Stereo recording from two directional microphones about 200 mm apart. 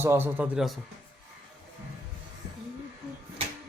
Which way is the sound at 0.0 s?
10° right (ahead or behind).